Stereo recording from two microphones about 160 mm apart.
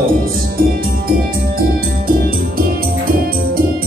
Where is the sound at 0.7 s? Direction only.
65° right (ahead or behind).